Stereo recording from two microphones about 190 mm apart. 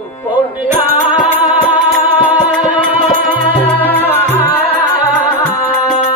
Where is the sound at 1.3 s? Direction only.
10° right (ahead or behind).